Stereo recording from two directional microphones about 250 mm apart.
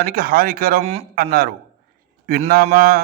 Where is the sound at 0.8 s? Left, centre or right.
Right.